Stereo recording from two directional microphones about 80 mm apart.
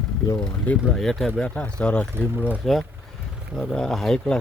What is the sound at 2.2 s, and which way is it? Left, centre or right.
Speech, left.